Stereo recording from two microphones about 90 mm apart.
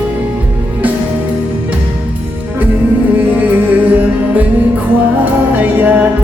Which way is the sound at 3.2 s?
20° right (ahead or behind).